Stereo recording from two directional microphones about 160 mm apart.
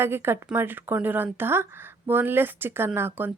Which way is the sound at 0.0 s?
15° right (ahead or behind).